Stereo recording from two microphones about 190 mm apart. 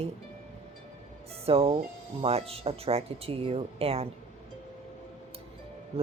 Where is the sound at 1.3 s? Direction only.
30° right (ahead or behind).